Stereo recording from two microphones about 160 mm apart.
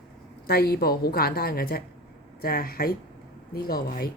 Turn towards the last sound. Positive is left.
turn(degrees=70)  # may be behind; listen again after turning